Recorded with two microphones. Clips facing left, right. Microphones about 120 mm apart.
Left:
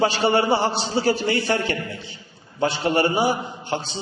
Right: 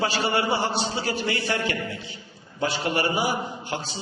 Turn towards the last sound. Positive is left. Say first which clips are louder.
# left 4 dB
turn(degrees=25)  # may be behind; listen again after turning